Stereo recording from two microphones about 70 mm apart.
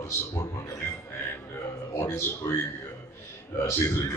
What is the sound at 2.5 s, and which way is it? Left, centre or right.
Speech, left.